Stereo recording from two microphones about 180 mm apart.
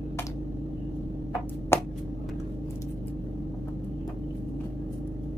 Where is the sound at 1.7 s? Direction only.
15° left (ahead or behind).